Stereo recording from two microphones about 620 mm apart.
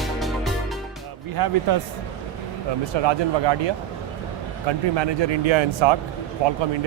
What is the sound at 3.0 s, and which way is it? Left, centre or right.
Speech, right.